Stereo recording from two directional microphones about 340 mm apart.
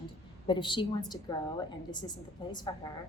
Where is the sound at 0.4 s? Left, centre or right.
Centre.